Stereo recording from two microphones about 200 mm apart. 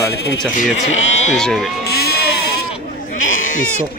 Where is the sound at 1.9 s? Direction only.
55° left (ahead or behind).